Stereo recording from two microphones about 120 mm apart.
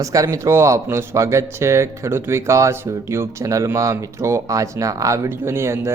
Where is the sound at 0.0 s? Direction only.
30° right (ahead or behind).